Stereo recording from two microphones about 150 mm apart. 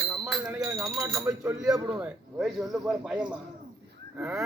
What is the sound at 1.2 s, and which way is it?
Speech, 20° right (ahead or behind).